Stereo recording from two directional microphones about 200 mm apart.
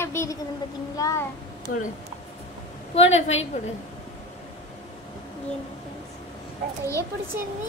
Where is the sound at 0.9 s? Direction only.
15° left (ahead or behind).